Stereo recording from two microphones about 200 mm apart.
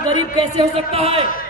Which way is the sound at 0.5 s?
30° right (ahead or behind).